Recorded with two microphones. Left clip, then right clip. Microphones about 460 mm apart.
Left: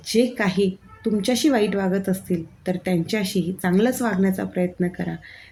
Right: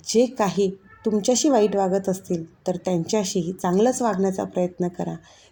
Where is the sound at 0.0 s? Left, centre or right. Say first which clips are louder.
Right 1 dB; left.